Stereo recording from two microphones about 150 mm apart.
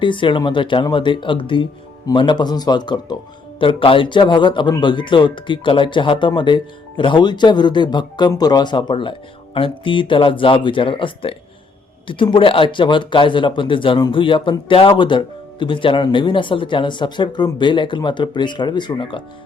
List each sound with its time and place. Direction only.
0.0 s speech: 35° left (ahead or behind)